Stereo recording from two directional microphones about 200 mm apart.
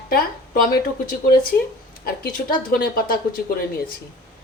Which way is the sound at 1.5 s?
15° left (ahead or behind).